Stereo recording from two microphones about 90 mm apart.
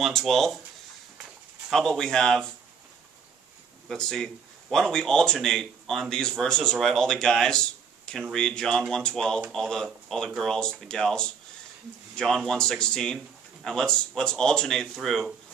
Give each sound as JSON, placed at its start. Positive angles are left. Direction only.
{"t": 0.0, "sound": "speech", "side_deg": 0}
{"t": 1.7, "sound": "speech", "side_deg": 5}
{"t": 3.9, "sound": "speech", "side_deg": 5}